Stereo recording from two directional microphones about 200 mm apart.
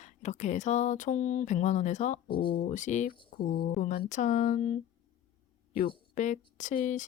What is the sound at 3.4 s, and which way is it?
Speech, 50° left (ahead or behind).